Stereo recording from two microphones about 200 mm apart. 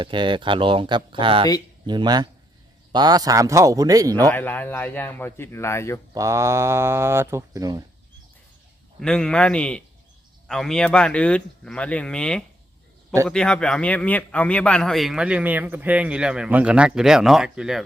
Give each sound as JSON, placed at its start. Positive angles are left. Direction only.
{"t": 0.0, "sound": "speech", "side_deg": -25}
{"t": 4.3, "sound": "a man's voice", "side_deg": 10}
{"t": 6.1, "sound": "speech", "side_deg": -15}
{"t": 9.0, "sound": "a man's voice", "side_deg": 5}